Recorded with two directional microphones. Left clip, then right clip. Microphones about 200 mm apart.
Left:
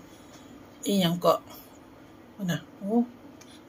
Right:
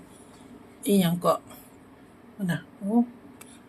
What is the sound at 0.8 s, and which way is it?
Speech, centre (ahead or behind).